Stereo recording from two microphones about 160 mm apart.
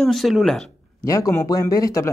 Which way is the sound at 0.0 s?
Centre (ahead or behind).